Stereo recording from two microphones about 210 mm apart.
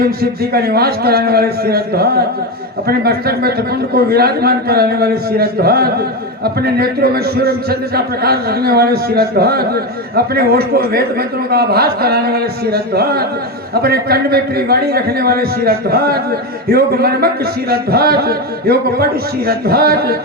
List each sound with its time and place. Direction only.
0.0 s a man's voice: 45° right (ahead or behind)